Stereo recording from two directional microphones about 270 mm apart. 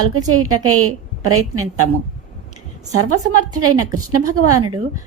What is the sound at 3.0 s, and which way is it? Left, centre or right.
A woman's voice, right.